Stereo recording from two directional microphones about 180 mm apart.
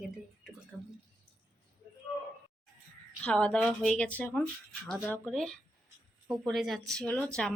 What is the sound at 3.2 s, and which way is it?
Speech, 5° left (ahead or behind).